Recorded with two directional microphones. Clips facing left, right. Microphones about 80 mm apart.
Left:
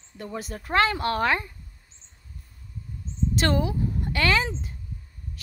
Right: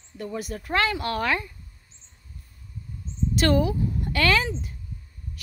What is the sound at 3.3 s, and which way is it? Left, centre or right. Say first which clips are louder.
A woman's voice: right 3 dB; left.